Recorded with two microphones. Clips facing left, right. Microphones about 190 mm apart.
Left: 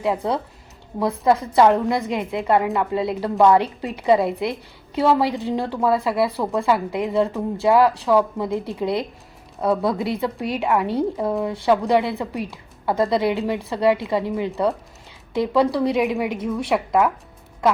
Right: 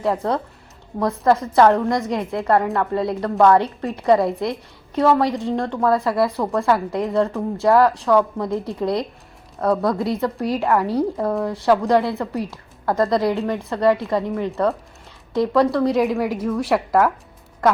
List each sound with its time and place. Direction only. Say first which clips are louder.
0.0 s a woman's voice: right 1 dB; 5° left (ahead or behind)